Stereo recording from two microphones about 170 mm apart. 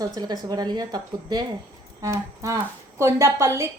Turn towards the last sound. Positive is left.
turn(degrees=-15)  # may be behind; listen again after turning